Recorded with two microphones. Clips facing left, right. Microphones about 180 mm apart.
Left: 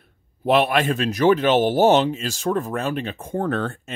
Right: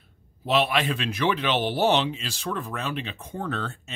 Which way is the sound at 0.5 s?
50° left (ahead or behind).